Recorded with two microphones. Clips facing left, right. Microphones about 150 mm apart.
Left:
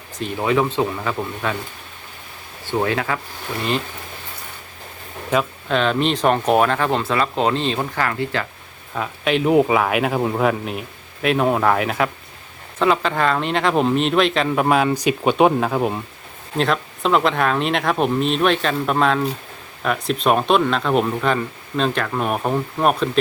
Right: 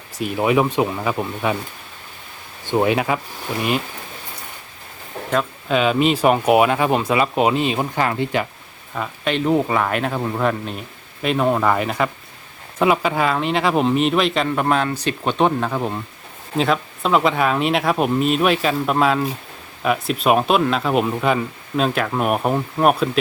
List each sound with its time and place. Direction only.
0.2 s speech: 15° right (ahead or behind)
2.6 s speech: 15° right (ahead or behind)
5.3 s speech: centre (ahead or behind); by 8.4 s 20° right (ahead or behind)
9.0 s speech: 5° left (ahead or behind)
12.8 s speech: 10° right (ahead or behind); by 16.0 s 10° left (ahead or behind)
16.6 s speech: centre (ahead or behind)